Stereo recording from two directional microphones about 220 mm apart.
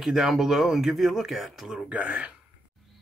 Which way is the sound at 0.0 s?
Centre (ahead or behind).